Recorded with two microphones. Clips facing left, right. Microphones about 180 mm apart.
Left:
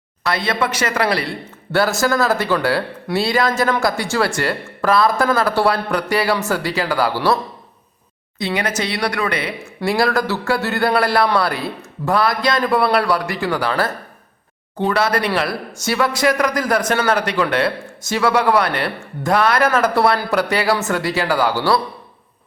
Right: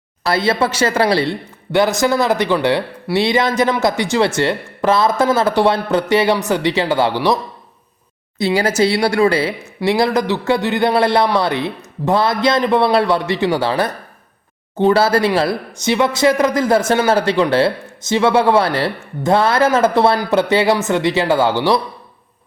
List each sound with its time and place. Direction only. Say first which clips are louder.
0.2 s speech: right 4 dB; 30° right (ahead or behind)
8.4 s speech: right 6 dB; 30° right (ahead or behind)